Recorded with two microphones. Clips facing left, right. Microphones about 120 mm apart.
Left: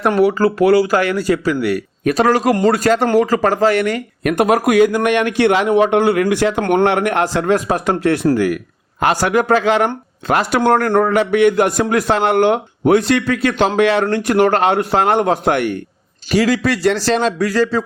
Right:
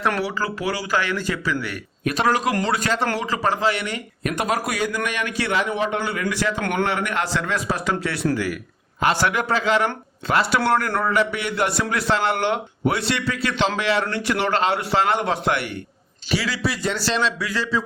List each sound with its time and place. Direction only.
0.2 s speech: 45° left (ahead or behind)
16.6 s speech: 90° left
17.1 s speech: 45° left (ahead or behind)